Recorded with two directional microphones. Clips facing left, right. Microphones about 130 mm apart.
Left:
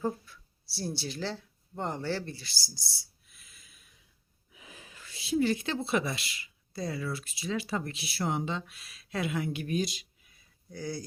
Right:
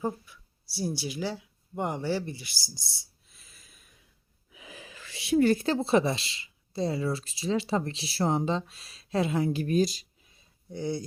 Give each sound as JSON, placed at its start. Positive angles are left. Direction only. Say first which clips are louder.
{"t": 0.0, "sound": "speech", "louder": "right 1 dB", "side_deg": -15}
{"t": 3.2, "sound": "snort", "louder": "right 2 dB", "side_deg": -35}
{"t": 4.5, "sound": "a sound", "louder": "right 5 dB", "side_deg": -90}
{"t": 5.5, "sound": "speech", "louder": "right 6 dB", "side_deg": -40}